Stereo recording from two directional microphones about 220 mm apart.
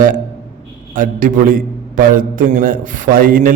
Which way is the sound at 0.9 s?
40° right (ahead or behind).